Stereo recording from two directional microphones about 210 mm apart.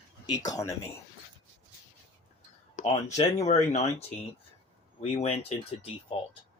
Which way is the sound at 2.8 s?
40° left (ahead or behind).